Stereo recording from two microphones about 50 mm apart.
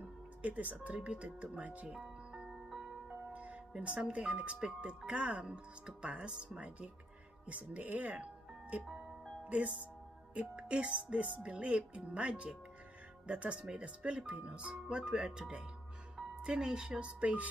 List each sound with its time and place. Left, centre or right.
0.4 s speech: right
1.9 s music: centre
3.1 s music: right
3.8 s speech: right